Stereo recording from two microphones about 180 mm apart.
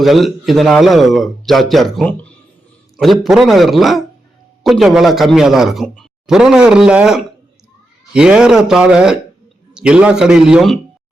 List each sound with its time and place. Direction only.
0.0 s a man's voice: centre (ahead or behind)